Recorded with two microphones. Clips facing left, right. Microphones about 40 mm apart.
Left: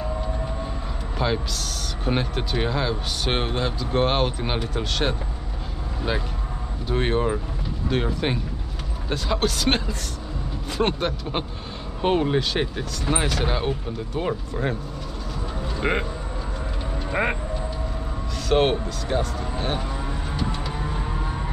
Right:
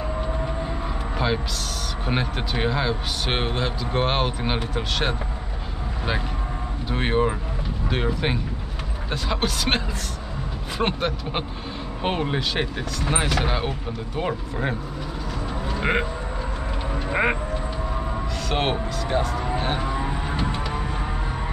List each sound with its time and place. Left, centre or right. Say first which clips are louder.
1.1 s music: even; centre
2.0 s speech: left 1 dB; centre
6.9 s speech: even; centre
15.8 s speech: right 1 dB; centre
17.1 s speech: right 2 dB; centre
18.5 s speech: left 5 dB; centre
19.8 s vehicle: right 4 dB; right